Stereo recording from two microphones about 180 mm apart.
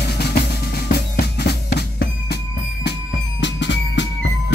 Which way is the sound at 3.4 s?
80° left.